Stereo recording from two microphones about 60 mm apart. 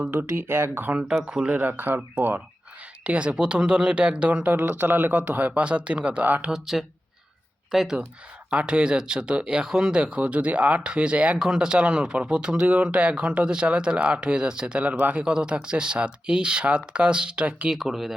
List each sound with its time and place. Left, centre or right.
0.1 s speech: right
1.2 s speech: centre
1.5 s speech: right
3.0 s speech: centre
6.5 s speech: centre
8.4 s speech: centre
17.7 s speech: centre